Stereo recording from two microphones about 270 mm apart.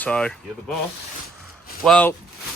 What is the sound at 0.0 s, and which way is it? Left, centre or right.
Speech, centre.